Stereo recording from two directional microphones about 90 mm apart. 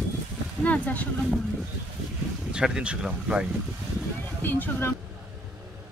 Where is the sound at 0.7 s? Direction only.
15° left (ahead or behind).